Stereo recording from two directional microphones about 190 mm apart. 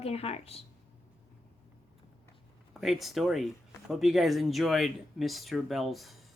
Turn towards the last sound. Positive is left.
turn(degrees=0)  # may be behind; listen again after turning